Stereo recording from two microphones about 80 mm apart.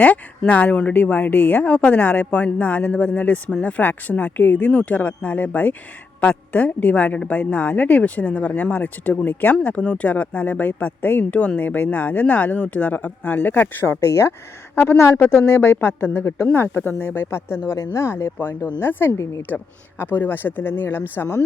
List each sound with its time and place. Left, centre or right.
0.0 s a woman's voice: centre